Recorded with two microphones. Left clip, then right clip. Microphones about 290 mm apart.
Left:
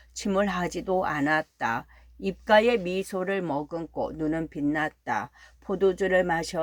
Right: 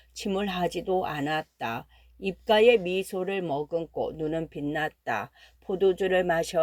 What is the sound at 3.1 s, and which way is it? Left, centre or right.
Speech, right.